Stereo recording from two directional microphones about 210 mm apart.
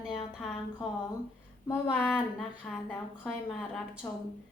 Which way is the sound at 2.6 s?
5° left (ahead or behind).